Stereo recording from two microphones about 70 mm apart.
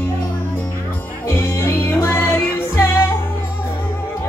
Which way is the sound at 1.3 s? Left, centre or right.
Left.